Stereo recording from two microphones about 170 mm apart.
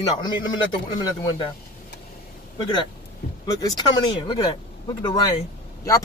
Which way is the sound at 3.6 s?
25° left (ahead or behind).